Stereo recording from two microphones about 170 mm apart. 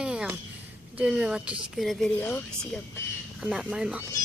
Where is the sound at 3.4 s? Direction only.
5° right (ahead or behind).